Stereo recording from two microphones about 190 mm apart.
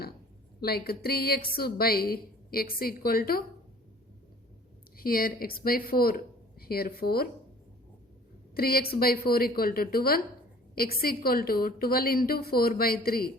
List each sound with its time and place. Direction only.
0.6 s a woman's voice: 55° left (ahead or behind)
4.9 s speech: 50° left (ahead or behind)
8.5 s a woman's voice: 50° left (ahead or behind)